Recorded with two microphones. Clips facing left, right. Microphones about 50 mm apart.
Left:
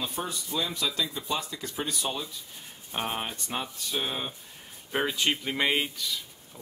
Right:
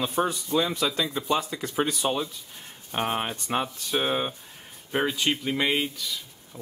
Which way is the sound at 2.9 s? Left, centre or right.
Centre.